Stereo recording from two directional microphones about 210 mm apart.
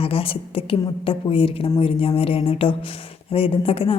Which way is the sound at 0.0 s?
25° left (ahead or behind).